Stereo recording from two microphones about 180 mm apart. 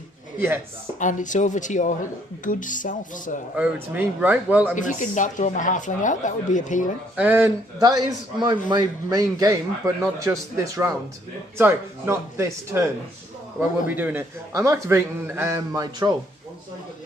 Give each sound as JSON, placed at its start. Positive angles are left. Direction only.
{"t": 0.3, "sound": "speech", "side_deg": -10}
{"t": 0.9, "sound": "speech", "side_deg": 45}
{"t": 3.5, "sound": "a man's voice", "side_deg": -10}
{"t": 4.7, "sound": "speech", "side_deg": 45}
{"t": 7.2, "sound": "a man's voice", "side_deg": -10}
{"t": 13.9, "sound": "a man's voice", "side_deg": -10}